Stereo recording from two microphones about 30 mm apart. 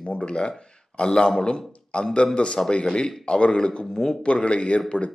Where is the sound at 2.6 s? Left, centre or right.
Centre.